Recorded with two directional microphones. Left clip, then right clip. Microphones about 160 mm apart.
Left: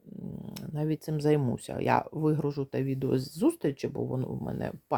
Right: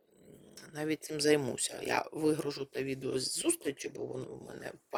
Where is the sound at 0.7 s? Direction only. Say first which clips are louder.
Left 2 dB; 10° right (ahead or behind).